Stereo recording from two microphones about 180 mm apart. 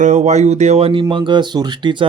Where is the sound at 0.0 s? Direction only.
40° right (ahead or behind).